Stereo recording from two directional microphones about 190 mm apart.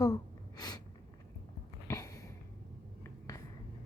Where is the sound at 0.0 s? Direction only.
20° left (ahead or behind).